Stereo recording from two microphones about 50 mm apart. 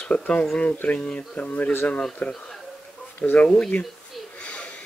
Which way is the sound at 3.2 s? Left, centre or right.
Left.